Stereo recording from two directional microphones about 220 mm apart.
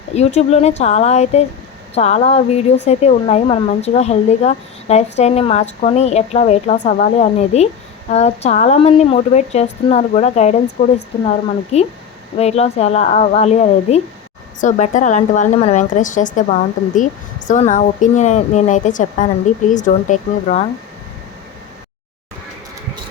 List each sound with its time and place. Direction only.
0.2 s a woman's voice: 30° left (ahead or behind)